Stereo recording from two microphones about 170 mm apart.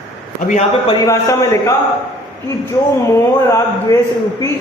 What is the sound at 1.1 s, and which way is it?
Speech, 20° left (ahead or behind).